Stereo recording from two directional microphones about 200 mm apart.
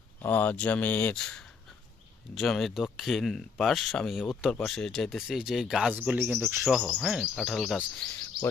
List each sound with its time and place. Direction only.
0.2 s speech: 5° left (ahead or behind)